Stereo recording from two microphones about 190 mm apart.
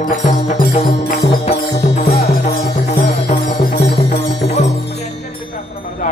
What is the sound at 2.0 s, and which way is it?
Music, 55° left (ahead or behind).